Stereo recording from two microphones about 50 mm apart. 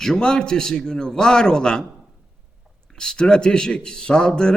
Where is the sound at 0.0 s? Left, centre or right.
Centre.